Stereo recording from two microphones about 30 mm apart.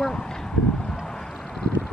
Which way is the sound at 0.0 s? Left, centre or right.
Left.